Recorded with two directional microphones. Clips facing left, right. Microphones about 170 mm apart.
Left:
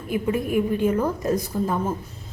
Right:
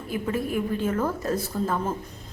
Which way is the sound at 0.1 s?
15° left (ahead or behind).